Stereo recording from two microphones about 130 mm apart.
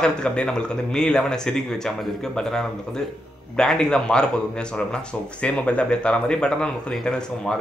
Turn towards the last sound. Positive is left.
turn(degrees=5)  # may be behind; listen again after turning